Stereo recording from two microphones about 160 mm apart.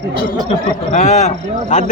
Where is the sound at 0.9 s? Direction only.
45° left (ahead or behind).